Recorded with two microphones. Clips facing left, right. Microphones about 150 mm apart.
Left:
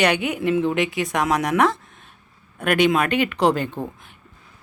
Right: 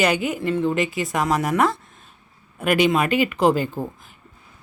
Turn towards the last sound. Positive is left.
turn(degrees=-5)  # may be behind; listen again after turning